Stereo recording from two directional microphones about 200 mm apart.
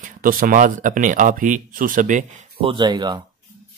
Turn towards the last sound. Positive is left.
turn(degrees=-20)  # may be behind; listen again after turning